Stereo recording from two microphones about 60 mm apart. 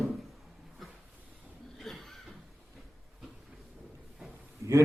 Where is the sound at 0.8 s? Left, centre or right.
Centre.